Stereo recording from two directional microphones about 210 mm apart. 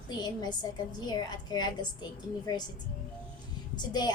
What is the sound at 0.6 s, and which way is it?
A woman's voice, 20° left (ahead or behind).